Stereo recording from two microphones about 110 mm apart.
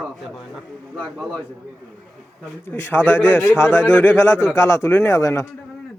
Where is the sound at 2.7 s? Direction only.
20° left (ahead or behind).